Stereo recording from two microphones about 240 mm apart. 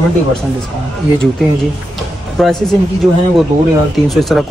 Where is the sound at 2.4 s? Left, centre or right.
Centre.